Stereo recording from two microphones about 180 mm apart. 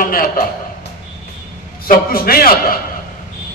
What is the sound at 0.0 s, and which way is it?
Speech, 50° left (ahead or behind).